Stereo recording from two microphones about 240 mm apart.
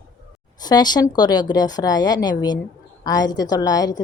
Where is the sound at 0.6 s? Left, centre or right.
Centre.